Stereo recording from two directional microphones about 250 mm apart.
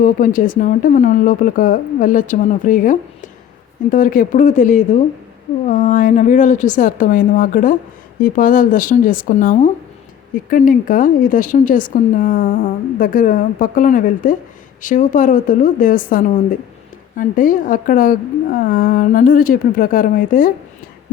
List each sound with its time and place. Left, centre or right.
0.0 s a woman's voice: left